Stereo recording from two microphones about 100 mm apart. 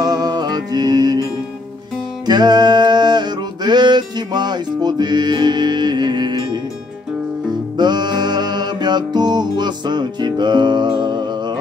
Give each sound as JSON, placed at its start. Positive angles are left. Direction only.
{"t": 0.0, "sound": "music", "side_deg": -45}
{"t": 2.2, "sound": "a sound", "side_deg": -45}
{"t": 7.7, "sound": "music", "side_deg": -45}